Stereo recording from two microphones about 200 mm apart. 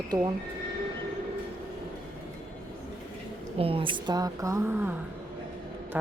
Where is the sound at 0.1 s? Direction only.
20° right (ahead or behind).